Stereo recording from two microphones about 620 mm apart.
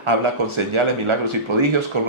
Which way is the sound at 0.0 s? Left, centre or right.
Right.